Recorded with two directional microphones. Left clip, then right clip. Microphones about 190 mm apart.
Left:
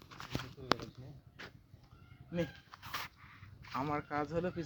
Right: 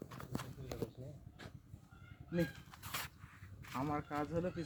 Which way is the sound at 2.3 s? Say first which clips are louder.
Left 1 dB; 5° left (ahead or behind).